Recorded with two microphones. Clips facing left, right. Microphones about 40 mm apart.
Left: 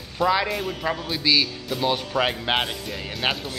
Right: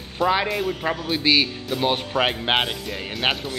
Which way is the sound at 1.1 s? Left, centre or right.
Right.